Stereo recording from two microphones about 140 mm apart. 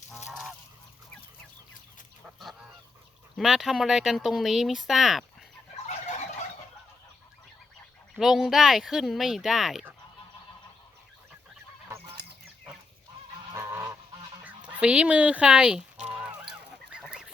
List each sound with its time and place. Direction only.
0.3 s goose: 5° right (ahead or behind)
2.4 s goose: centre (ahead or behind)
3.3 s speech: centre (ahead or behind)
5.9 s fowl: 55° left (ahead or behind)
8.1 s speech: centre (ahead or behind)
13.5 s goose: 20° right (ahead or behind)
14.4 s honk: 10° right (ahead or behind)